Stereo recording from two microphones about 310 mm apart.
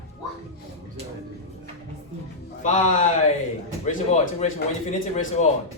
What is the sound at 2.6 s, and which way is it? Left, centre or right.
Music, left.